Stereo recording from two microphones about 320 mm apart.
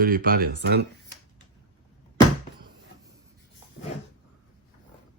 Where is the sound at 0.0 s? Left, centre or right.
Right.